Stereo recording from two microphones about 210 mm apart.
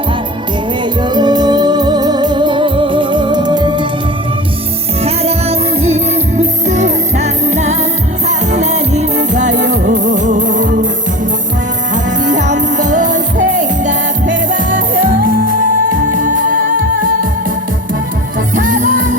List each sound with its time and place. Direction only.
1.1 s music: 20° right (ahead or behind)
5.0 s music: 30° right (ahead or behind)
12.2 s music: 35° right (ahead or behind)
18.5 s music: 35° right (ahead or behind)